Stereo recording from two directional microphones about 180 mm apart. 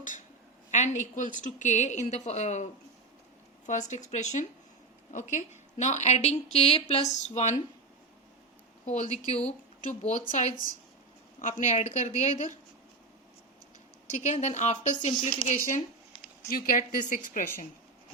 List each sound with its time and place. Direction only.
0.7 s a woman's voice: 45° left (ahead or behind)
3.7 s a woman's voice: 40° left (ahead or behind)
8.9 s a woman's voice: 40° left (ahead or behind)
14.2 s a woman's voice: 40° left (ahead or behind)